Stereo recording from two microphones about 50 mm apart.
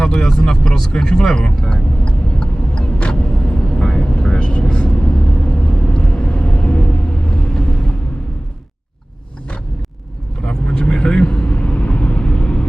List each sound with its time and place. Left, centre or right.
0.0 s speech: centre
1.6 s vehicle: centre
10.4 s vehicle: centre
11.4 s vehicle: left